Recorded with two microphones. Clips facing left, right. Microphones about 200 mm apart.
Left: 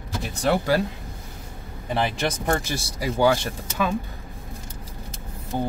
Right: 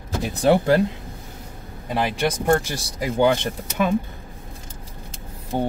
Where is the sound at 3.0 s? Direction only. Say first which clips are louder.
Right 2 dB; 20° right (ahead or behind).